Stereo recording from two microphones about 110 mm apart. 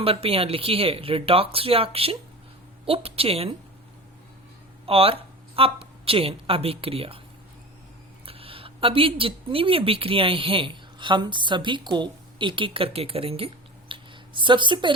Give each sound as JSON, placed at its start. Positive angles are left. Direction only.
{"t": 0.0, "sound": "speech", "side_deg": -60}
{"t": 4.9, "sound": "a woman's voice", "side_deg": -60}
{"t": 8.2, "sound": "a woman's voice", "side_deg": -55}